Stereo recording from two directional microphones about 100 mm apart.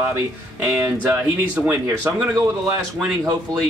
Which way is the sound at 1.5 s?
15° right (ahead or behind).